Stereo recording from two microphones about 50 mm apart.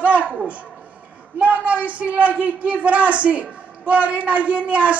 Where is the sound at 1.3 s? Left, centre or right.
Right.